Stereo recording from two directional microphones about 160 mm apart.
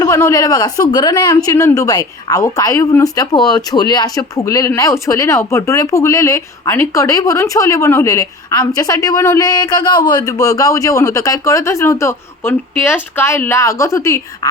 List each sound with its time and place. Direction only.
0.0 s speech: 20° left (ahead or behind)